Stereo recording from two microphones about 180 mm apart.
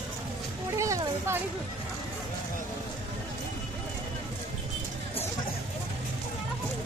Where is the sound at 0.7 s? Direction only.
15° right (ahead or behind).